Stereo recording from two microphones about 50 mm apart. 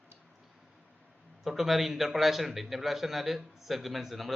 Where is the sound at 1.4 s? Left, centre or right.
Centre.